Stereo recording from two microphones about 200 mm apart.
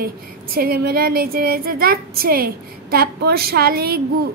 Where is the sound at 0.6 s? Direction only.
50° right (ahead or behind).